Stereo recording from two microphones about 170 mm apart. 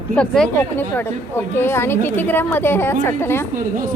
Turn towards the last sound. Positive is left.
turn(degrees=15)  # may be behind; listen again after turning